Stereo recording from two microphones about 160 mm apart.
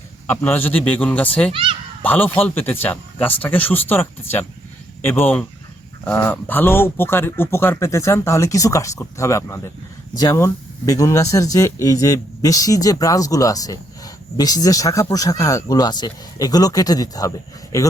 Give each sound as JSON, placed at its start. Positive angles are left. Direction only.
{"t": 0.3, "sound": "speech", "side_deg": 15}